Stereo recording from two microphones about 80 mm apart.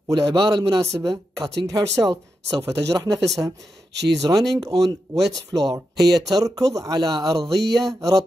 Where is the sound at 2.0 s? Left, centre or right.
Right.